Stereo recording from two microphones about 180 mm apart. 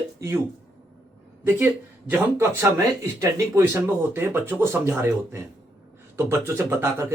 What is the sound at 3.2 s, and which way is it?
Speech, 15° right (ahead or behind).